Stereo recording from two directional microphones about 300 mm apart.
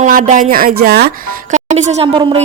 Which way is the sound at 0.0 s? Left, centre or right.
Right.